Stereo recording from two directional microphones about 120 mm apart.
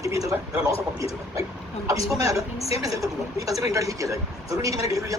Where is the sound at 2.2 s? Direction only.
30° right (ahead or behind).